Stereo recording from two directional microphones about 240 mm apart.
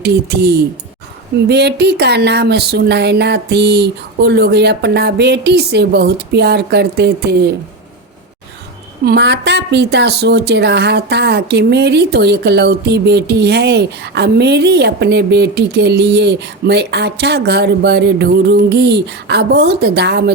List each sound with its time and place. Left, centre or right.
0.0 s a woman's voice: right
9.0 s a woman's voice: right